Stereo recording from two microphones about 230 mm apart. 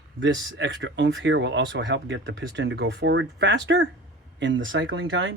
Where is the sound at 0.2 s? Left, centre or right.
Right.